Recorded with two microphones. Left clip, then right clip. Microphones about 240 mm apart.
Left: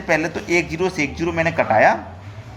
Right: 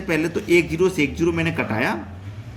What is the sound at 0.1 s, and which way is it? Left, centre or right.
Speech, centre.